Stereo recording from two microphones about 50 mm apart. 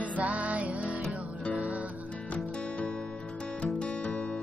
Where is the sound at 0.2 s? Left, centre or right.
Right.